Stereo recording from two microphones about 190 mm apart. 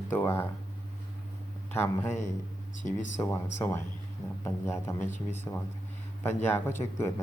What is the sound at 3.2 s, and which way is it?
Speech, 20° left (ahead or behind).